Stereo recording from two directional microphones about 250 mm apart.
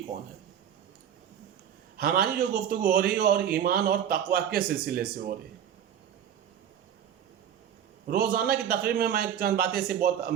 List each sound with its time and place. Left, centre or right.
2.0 s a man's voice: right
8.0 s a man's voice: right